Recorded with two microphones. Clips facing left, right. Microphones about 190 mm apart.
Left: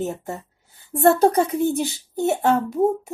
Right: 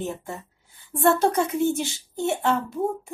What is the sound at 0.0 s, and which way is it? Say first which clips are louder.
Speech: left 4 dB; 40° left (ahead or behind).